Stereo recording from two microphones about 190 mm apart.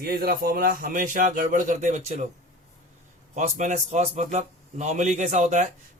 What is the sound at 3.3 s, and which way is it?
Speech, 40° right (ahead or behind).